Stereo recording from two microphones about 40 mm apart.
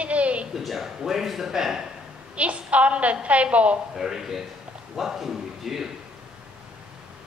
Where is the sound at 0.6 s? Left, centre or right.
Centre.